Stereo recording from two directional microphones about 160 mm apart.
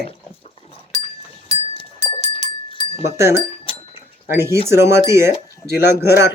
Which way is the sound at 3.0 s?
15° right (ahead or behind).